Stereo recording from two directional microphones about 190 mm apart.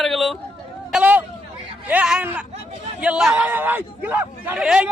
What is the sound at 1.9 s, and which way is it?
Speech, 5° right (ahead or behind).